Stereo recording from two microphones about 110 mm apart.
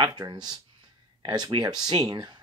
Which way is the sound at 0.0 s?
40° right (ahead or behind).